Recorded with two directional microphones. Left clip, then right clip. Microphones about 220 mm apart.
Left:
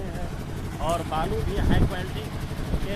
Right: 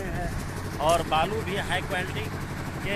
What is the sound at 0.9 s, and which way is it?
Speech, 25° right (ahead or behind).